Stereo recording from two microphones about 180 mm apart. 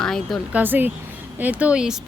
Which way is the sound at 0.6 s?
10° right (ahead or behind).